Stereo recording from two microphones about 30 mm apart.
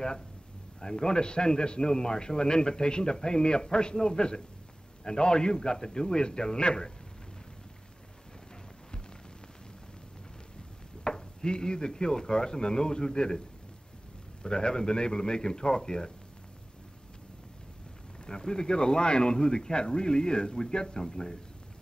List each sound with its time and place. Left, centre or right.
0.7 s a man's voice: left
11.1 s a man's voice: left
14.4 s a man's voice: left
18.2 s a man's voice: left